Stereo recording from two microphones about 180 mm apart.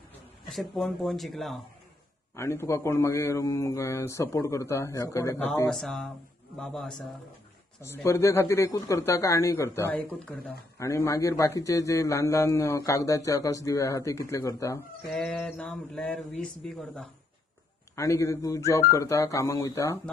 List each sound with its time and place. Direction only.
0.5 s speech: centre (ahead or behind)
2.3 s a man's voice: 15° left (ahead or behind)
5.7 s speech: centre (ahead or behind)
7.8 s a man's voice: 15° left (ahead or behind)
10.8 s a man's voice: 15° left (ahead or behind)
15.0 s speech: centre (ahead or behind)
17.9 s a man's voice: 15° left (ahead or behind)